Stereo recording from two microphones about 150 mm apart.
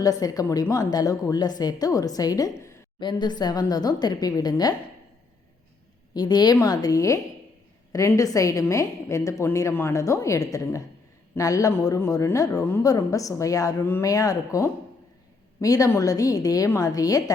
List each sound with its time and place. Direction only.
0.0 s a woman's voice: 25° left (ahead or behind)
6.1 s a woman's voice: 25° left (ahead or behind)